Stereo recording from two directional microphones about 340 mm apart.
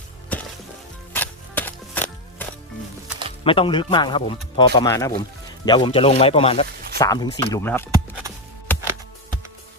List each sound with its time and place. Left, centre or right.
0.3 s music: centre
3.4 s speech: centre
8.7 s music: centre